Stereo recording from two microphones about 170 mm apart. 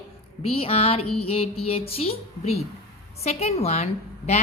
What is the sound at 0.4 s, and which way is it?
A woman's voice, 35° left (ahead or behind).